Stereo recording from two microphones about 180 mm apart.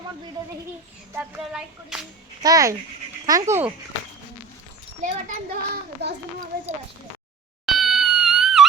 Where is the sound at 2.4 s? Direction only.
20° right (ahead or behind).